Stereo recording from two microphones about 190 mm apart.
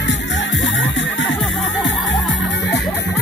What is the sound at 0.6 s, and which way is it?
Music, 75° left (ahead or behind).